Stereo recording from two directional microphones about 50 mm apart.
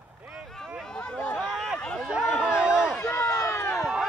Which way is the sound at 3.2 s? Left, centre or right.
Centre.